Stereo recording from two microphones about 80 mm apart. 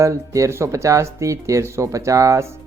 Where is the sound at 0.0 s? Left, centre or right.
Right.